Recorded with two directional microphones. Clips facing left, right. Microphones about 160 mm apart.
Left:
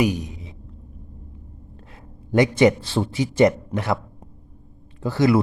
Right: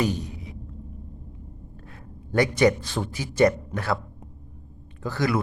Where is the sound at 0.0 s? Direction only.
15° left (ahead or behind).